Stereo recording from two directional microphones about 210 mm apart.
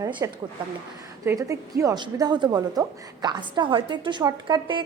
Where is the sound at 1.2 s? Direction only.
15° right (ahead or behind).